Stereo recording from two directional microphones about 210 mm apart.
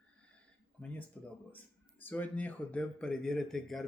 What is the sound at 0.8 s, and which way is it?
Speech, 5° left (ahead or behind).